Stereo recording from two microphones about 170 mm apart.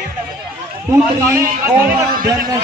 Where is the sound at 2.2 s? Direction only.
20° right (ahead or behind).